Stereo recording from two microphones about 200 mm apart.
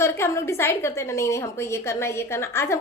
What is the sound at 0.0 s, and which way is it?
A woman's voice, 15° left (ahead or behind).